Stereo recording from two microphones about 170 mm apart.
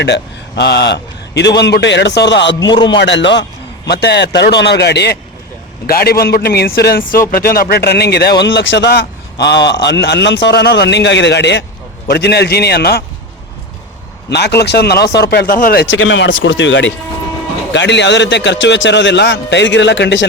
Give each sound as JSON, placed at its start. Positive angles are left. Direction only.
{"t": 0.0, "sound": "a man's voice", "side_deg": 90}
{"t": 2.6, "sound": "a man's voice", "side_deg": 25}
{"t": 2.9, "sound": "a man's voice", "side_deg": 90}
{"t": 3.8, "sound": "a man's voice", "side_deg": 75}
{"t": 5.8, "sound": "a man's voice", "side_deg": 60}
{"t": 12.0, "sound": "a man's voice", "side_deg": 75}
{"t": 14.3, "sound": "a man's voice", "side_deg": 75}